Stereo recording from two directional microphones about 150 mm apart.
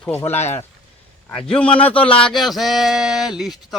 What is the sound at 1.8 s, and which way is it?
Speech, 10° left (ahead or behind).